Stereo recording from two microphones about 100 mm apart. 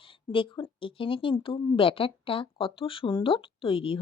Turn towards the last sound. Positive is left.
turn(degrees=65)  # may be behind; listen again after turning